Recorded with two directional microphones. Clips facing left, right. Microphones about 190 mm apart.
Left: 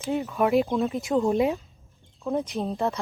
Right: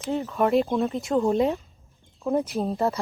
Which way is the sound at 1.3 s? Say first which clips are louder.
Right 1 dB; 15° left (ahead or behind).